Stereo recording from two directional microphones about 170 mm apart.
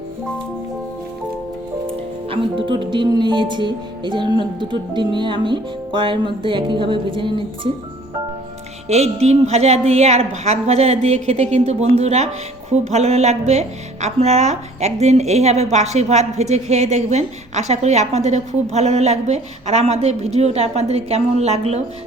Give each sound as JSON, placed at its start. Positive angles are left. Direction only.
{"t": 2.3, "sound": "speech", "side_deg": -30}
{"t": 8.9, "sound": "a woman's voice", "side_deg": -40}